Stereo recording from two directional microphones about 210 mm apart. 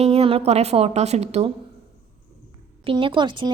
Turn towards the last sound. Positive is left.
turn(degrees=-20)  # may be behind; listen again after turning